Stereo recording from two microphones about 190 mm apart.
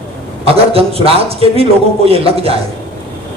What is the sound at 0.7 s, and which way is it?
A man's voice, 30° right (ahead or behind).